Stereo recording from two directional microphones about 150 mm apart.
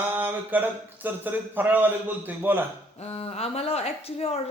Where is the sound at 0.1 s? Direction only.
15° right (ahead or behind).